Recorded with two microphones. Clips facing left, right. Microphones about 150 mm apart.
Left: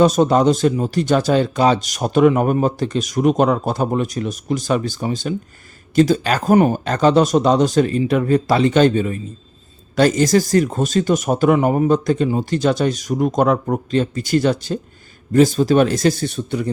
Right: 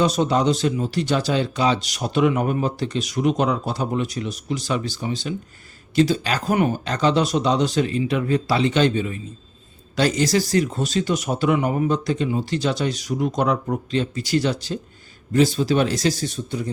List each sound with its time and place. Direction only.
0.0 s speech: 45° left (ahead or behind); by 16.6 s 60° left (ahead or behind)